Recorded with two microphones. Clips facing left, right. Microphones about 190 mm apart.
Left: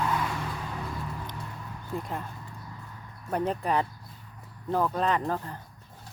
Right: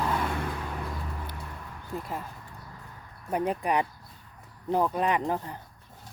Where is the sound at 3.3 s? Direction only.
10° right (ahead or behind).